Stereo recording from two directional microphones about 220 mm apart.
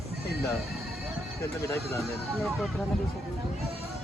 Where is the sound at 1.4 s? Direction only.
15° left (ahead or behind).